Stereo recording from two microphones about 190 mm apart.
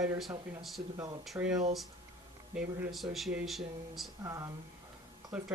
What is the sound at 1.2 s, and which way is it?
Speech, centre (ahead or behind).